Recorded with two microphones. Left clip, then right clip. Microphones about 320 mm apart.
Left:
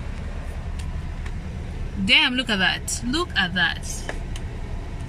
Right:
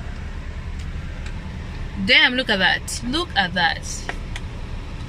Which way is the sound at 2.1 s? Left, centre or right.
Right.